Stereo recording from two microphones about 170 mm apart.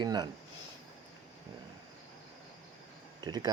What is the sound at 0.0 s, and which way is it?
Speech, 25° right (ahead or behind).